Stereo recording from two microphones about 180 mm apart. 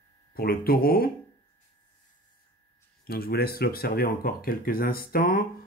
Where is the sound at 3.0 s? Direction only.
55° left (ahead or behind).